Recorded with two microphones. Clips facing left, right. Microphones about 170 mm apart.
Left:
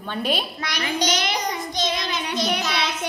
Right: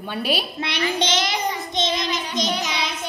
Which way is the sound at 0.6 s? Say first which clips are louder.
Right 1 dB; 25° right (ahead or behind).